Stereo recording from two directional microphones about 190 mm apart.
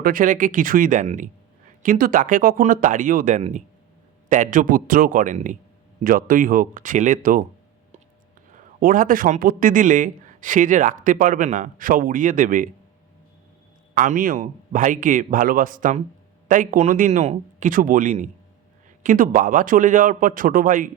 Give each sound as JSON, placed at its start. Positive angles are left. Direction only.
{"t": 0.0, "sound": "a man's voice", "side_deg": -45}
{"t": 8.5, "sound": "a man's voice", "side_deg": -45}
{"t": 13.9, "sound": "a man's voice", "side_deg": -45}